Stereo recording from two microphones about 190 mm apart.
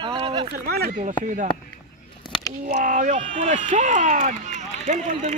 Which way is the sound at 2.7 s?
40° right (ahead or behind).